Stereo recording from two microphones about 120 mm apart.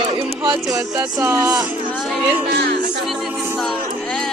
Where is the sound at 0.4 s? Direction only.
30° right (ahead or behind).